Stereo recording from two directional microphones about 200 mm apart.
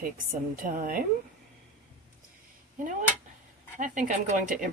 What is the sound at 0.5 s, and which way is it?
Speech, 45° right (ahead or behind).